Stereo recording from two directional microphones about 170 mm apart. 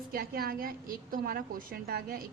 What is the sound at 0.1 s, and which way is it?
A woman's voice, 60° right (ahead or behind).